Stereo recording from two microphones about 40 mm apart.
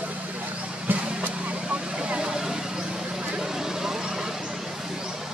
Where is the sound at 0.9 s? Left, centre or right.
Right; by 4.3 s centre.